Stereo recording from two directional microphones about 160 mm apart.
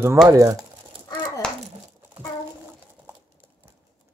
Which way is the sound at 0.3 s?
20° right (ahead or behind).